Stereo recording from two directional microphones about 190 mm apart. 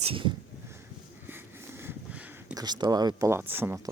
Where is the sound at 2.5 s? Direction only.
20° right (ahead or behind).